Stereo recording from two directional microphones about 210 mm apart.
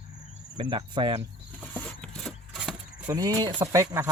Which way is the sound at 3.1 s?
20° right (ahead or behind).